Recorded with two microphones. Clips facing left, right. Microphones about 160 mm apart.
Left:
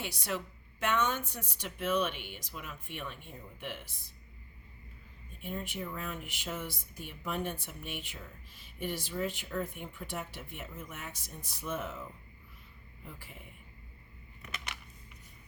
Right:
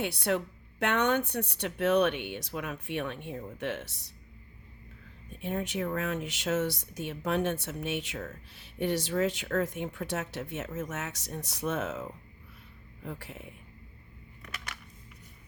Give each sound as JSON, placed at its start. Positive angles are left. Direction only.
{"t": 0.0, "sound": "speech", "side_deg": -65}
{"t": 5.4, "sound": "speech", "side_deg": -75}